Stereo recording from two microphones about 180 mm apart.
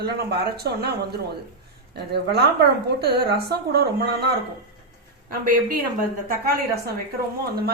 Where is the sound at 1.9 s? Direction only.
65° right (ahead or behind).